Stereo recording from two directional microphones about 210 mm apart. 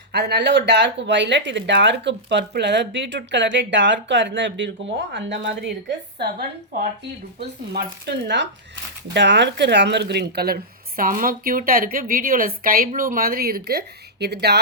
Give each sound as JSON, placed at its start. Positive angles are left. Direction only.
{"t": 0.1, "sound": "speech", "side_deg": -50}
{"t": 7.3, "sound": "speech", "side_deg": -50}